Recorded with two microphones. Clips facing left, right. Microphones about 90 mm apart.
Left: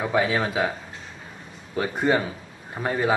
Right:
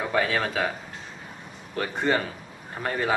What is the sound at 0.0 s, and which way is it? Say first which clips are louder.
Speech: left 2 dB; 15° left (ahead or behind).